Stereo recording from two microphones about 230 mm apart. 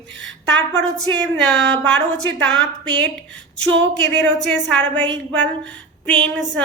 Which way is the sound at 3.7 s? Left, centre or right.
Right.